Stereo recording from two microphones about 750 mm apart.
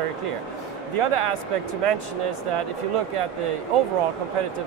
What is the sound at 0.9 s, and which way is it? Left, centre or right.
Speech, right.